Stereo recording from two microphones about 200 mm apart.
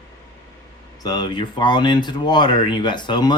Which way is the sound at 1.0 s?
20° left (ahead or behind).